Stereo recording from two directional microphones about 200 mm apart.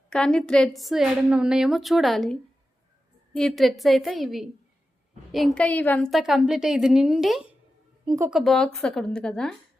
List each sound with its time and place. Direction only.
0.1 s a woman's voice: 5° left (ahead or behind)
8.0 s speech: 15° right (ahead or behind)
8.3 s a woman's voice: centre (ahead or behind)